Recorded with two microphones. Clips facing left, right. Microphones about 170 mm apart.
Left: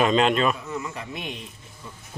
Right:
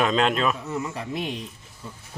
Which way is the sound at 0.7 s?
30° right (ahead or behind).